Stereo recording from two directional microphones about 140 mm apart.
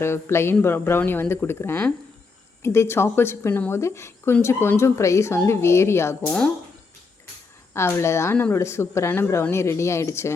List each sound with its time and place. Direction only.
0.0 s speech: 20° left (ahead or behind)
6.2 s speech: 5° left (ahead or behind)
7.7 s speech: 20° left (ahead or behind)